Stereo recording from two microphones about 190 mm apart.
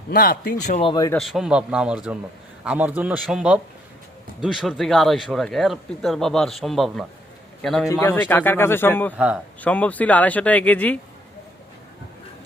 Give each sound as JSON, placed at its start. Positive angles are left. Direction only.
{"t": 0.1, "sound": "speech", "side_deg": 55}
{"t": 0.9, "sound": "speech", "side_deg": 20}
{"t": 1.1, "sound": "speech", "side_deg": 0}
{"t": 9.1, "sound": "speech", "side_deg": -5}
{"t": 9.6, "sound": "speech", "side_deg": 5}